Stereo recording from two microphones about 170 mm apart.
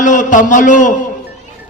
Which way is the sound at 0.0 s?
50° left (ahead or behind).